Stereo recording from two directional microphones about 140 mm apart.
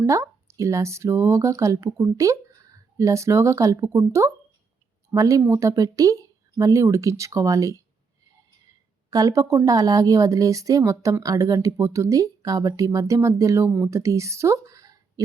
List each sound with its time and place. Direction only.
0.0 s speech: 20° right (ahead or behind)
9.0 s speech: 25° right (ahead or behind)